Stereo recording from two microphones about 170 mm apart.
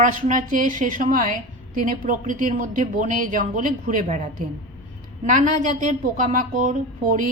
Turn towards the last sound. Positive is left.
turn(degrees=-50)  # may be behind; listen again after turning